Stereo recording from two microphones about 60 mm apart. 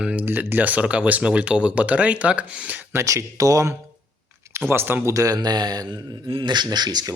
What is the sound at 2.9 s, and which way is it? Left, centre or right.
Speech, right.